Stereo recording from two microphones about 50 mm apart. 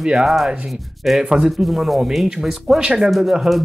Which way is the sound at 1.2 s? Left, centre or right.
Centre.